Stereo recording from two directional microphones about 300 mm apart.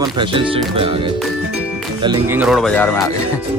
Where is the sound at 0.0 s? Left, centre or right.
Centre.